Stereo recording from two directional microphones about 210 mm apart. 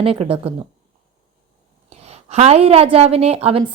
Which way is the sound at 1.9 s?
30° right (ahead or behind).